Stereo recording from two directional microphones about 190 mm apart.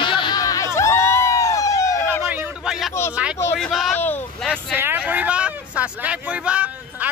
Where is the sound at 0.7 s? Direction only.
15° left (ahead or behind).